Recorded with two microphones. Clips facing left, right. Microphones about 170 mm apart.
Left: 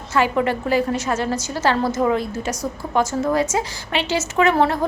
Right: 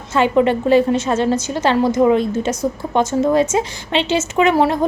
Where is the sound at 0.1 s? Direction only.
20° right (ahead or behind).